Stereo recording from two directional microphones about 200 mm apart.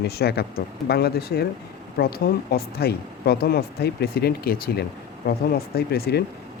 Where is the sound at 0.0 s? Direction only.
50° left (ahead or behind).